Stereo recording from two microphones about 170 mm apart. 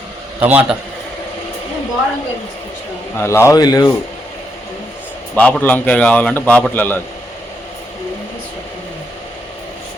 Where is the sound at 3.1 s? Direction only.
15° left (ahead or behind).